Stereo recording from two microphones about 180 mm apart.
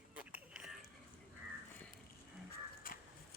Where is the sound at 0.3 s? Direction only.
5° right (ahead or behind).